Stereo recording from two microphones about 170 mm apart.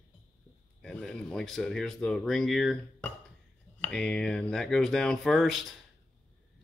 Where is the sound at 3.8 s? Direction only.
5° left (ahead or behind).